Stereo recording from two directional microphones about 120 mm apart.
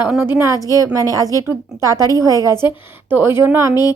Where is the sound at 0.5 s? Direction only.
30° left (ahead or behind).